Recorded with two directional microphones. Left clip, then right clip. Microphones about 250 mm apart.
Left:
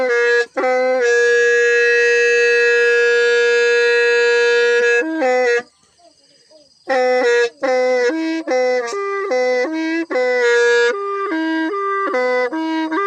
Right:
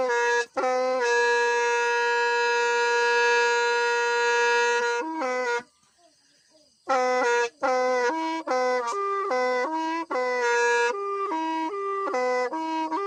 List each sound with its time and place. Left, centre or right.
0.0 s wind instrument: right
5.2 s music: centre
6.8 s music: right